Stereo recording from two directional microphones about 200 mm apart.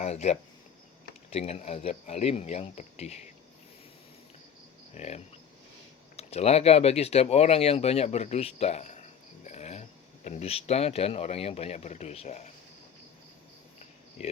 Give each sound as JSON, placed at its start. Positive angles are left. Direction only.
{"t": 0.0, "sound": "speech", "side_deg": 35}
{"t": 4.9, "sound": "speech", "side_deg": 35}
{"t": 9.5, "sound": "a sound", "side_deg": 35}
{"t": 10.2, "sound": "speech", "side_deg": 35}
{"t": 14.2, "sound": "speech", "side_deg": 30}